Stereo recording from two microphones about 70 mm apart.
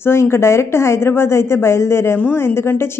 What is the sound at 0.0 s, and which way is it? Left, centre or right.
A man's voice, left.